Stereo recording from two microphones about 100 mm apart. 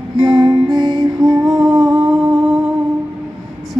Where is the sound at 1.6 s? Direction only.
5° right (ahead or behind).